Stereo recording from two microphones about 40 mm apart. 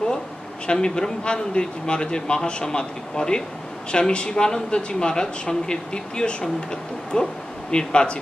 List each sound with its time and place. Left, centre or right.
0.7 s speech: centre